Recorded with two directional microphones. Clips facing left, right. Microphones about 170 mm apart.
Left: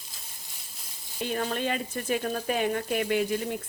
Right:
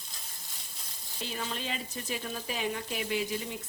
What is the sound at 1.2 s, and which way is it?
Speech, 55° left (ahead or behind).